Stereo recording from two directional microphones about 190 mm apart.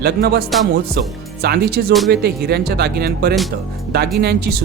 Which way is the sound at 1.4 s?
55° right (ahead or behind).